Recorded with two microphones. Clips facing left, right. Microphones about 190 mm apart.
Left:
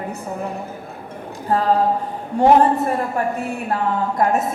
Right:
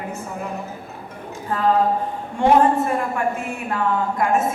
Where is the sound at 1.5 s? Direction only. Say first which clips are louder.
Left 1 dB; 35° left (ahead or behind).